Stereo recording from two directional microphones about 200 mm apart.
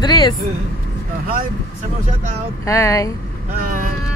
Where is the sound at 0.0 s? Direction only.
20° left (ahead or behind).